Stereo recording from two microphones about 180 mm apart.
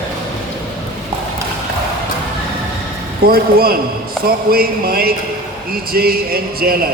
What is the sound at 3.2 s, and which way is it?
A man's voice, 55° right (ahead or behind).